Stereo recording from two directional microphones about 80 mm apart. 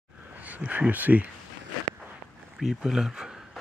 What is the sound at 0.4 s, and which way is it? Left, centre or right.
Speech, centre.